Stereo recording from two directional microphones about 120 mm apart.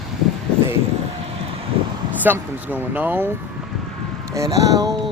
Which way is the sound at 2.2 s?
15° right (ahead or behind).